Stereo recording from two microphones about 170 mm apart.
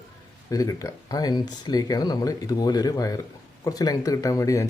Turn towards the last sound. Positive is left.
turn(degrees=20)  # may be behind; listen again after turning